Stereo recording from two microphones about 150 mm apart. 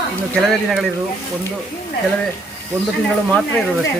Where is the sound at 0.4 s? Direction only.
Centre (ahead or behind).